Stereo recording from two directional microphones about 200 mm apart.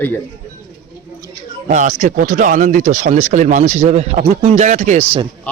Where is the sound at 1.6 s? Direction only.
40° right (ahead or behind).